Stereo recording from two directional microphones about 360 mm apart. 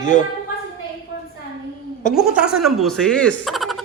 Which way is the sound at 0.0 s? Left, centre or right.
Left.